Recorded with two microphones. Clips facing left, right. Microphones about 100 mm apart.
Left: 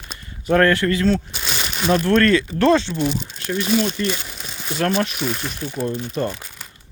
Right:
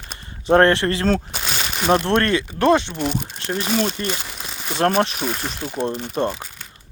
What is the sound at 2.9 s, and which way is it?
Speech, 55° right (ahead or behind).